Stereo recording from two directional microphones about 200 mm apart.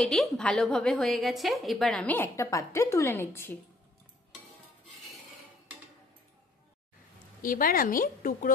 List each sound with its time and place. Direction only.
0.0 s a woman's voice: centre (ahead or behind)
7.4 s a woman's voice: 45° left (ahead or behind)